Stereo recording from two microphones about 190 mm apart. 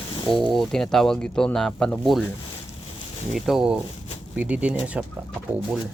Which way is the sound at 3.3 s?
Centre (ahead or behind).